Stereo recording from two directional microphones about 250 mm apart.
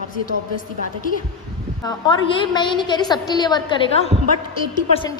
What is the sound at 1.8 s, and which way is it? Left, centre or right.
A woman's voice, centre.